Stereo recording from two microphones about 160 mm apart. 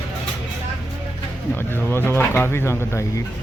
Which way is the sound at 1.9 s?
15° left (ahead or behind).